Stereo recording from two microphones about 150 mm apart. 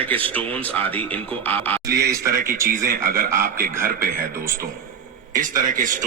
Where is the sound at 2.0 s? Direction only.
20° right (ahead or behind).